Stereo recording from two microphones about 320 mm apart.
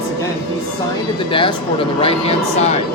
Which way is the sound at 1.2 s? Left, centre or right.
Centre.